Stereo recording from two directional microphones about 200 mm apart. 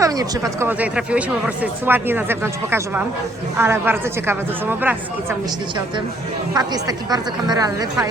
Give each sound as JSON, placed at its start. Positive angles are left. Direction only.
{"t": 0.0, "sound": "speech", "side_deg": -15}
{"t": 6.5, "sound": "speech", "side_deg": -20}